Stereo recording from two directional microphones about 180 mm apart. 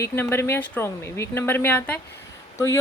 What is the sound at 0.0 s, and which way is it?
A woman's voice, 15° left (ahead or behind).